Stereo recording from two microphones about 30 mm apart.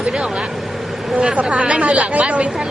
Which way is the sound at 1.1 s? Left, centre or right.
Right.